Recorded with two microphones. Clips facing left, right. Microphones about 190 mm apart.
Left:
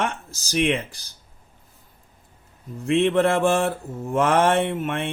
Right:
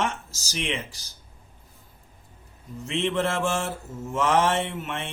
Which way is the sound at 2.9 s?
55° left (ahead or behind).